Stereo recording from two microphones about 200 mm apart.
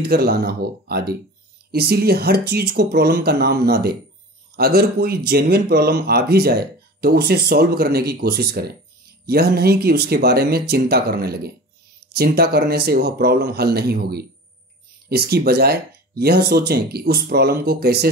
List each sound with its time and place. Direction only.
0.0 s speech: 50° right (ahead or behind)